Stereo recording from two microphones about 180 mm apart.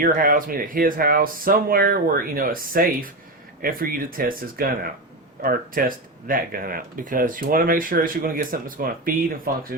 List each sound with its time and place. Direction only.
0.0 s speech: 50° right (ahead or behind)